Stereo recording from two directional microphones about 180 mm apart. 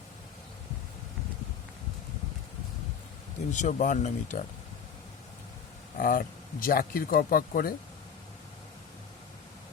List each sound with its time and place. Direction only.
3.5 s speech: 40° left (ahead or behind)
6.0 s speech: 50° left (ahead or behind)